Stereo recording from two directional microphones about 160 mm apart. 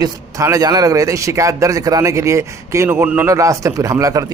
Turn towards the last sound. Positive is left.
turn(degrees=-20)  # may be behind; listen again after turning